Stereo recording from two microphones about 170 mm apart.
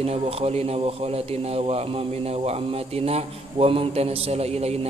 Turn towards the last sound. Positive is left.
turn(degrees=-35)  # may be behind; listen again after turning